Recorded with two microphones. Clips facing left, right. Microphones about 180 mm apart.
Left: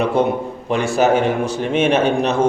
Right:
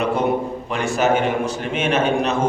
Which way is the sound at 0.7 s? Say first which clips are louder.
Left 4 dB; 30° left (ahead or behind).